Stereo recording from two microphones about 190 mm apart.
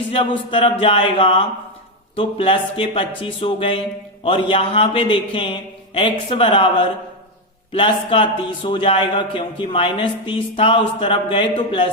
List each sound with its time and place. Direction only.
0.1 s speech: 30° left (ahead or behind)